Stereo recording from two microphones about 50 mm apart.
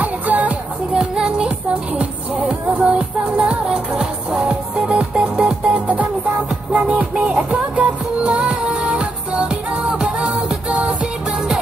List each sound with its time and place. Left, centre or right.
0.0 s music: right
0.9 s music: centre